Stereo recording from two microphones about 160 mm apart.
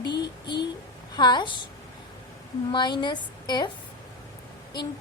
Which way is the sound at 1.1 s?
25° left (ahead or behind).